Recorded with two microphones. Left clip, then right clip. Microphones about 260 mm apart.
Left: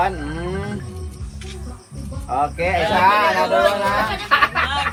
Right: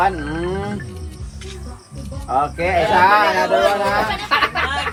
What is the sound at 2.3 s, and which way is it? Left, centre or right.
Speech, right.